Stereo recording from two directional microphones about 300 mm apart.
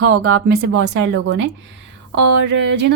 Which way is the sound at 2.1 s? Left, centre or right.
Right.